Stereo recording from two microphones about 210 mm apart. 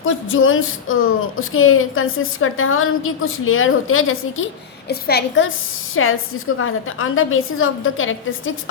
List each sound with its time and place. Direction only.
0.0 s speech: 70° left (ahead or behind)
4.9 s a woman's voice: 50° left (ahead or behind)
5.9 s a woman's voice: 75° left (ahead or behind)